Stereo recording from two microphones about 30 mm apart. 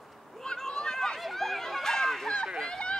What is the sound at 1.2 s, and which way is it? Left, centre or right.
Chatter, centre.